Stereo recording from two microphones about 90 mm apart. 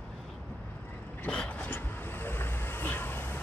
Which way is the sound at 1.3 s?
10° left (ahead or behind).